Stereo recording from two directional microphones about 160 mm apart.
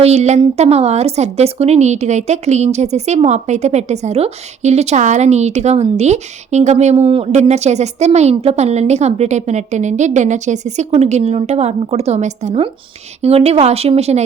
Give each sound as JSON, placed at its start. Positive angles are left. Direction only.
{"t": 0.0, "sound": "a woman's voice", "side_deg": -40}